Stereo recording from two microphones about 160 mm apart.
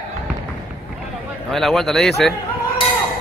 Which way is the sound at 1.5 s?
Centre (ahead or behind).